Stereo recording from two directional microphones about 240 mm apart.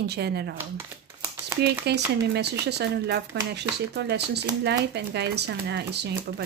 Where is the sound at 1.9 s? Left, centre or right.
Right.